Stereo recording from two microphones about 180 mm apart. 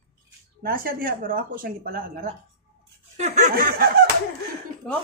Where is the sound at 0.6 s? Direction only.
55° right (ahead or behind).